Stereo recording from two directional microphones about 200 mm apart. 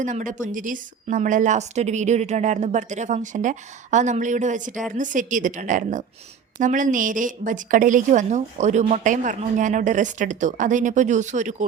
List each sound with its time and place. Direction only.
0.0 s speech: 40° right (ahead or behind)